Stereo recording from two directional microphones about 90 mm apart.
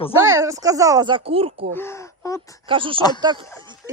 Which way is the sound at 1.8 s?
30° left (ahead or behind).